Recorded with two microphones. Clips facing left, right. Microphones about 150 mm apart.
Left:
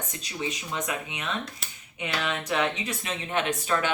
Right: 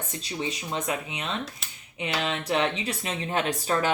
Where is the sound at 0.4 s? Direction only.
30° right (ahead or behind).